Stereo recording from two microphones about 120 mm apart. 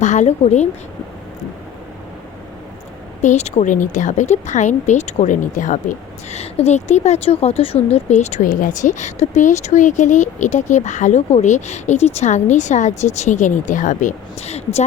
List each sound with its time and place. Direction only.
0.0 s a woman's voice: 80° left
3.2 s speech: 75° left (ahead or behind)
13.0 s speech: 75° left (ahead or behind)